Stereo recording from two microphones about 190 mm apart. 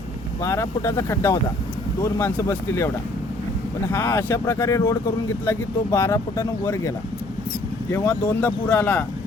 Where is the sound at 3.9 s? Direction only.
15° left (ahead or behind).